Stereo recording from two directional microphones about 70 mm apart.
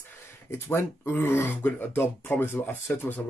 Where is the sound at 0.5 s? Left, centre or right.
Left.